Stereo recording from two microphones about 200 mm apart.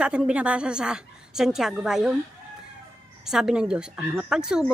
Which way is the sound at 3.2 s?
Centre (ahead or behind).